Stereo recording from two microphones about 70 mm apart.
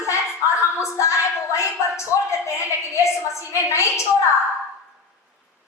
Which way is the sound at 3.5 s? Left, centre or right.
Left.